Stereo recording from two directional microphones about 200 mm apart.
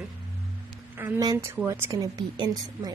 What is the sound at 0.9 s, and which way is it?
A woman's voice, 10° right (ahead or behind).